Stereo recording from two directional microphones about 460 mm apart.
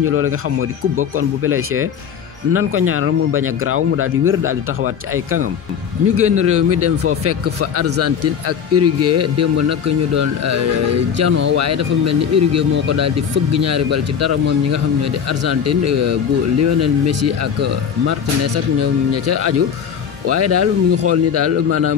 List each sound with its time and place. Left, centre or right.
0.0 s speech: right